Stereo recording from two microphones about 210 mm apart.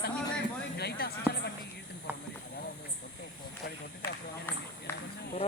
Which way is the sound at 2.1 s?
10° right (ahead or behind).